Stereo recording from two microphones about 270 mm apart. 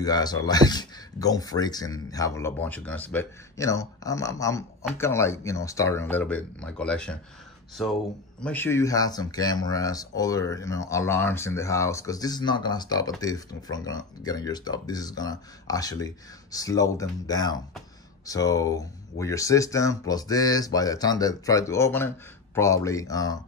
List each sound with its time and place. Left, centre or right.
0.0 s speech: centre
8.4 s speech: centre